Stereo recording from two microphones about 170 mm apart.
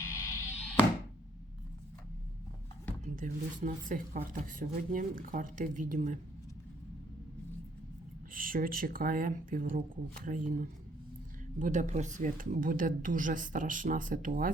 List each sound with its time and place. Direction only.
0.0 s music: 15° left (ahead or behind)
0.4 s music: 10° right (ahead or behind)
3.0 s speech: 50° right (ahead or behind)
8.3 s speech: 55° right (ahead or behind)
11.6 s speech: 45° right (ahead or behind)